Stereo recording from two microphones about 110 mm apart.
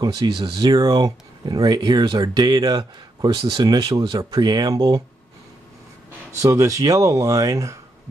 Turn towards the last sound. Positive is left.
turn(degrees=-30)  # may be behind; listen again after turning